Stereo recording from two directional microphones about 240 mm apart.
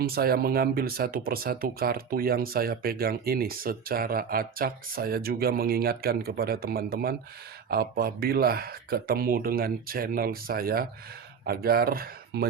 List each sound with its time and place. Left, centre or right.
0.0 s speech: right